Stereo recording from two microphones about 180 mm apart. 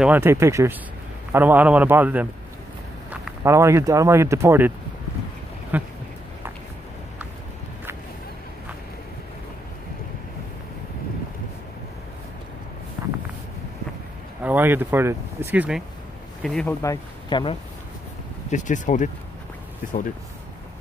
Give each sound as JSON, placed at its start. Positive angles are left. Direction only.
{"t": 0.0, "sound": "speech", "side_deg": -10}
{"t": 3.4, "sound": "speech", "side_deg": -15}
{"t": 14.4, "sound": "speech", "side_deg": -10}
{"t": 16.4, "sound": "speech", "side_deg": 0}
{"t": 16.8, "sound": "speech", "side_deg": 20}
{"t": 18.5, "sound": "speech", "side_deg": 45}